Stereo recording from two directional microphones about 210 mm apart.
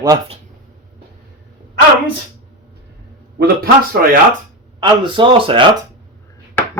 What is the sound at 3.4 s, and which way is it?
Speech, 45° right (ahead or behind).